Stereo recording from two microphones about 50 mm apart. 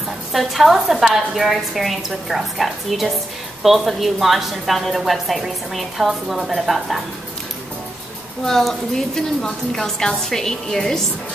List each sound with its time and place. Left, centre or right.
0.3 s a woman's voice: centre
8.5 s a woman's voice: centre